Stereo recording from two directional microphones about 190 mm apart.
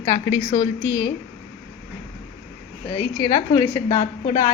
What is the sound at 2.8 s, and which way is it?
A woman's voice, 15° left (ahead or behind).